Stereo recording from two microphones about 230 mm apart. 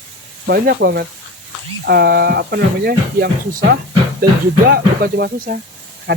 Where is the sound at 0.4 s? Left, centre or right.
Right.